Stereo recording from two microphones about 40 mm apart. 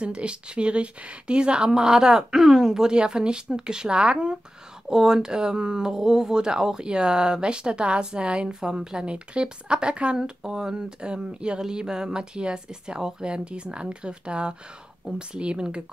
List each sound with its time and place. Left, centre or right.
0.0 s speech: right